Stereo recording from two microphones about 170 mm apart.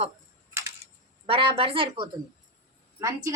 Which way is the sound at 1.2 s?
30° right (ahead or behind).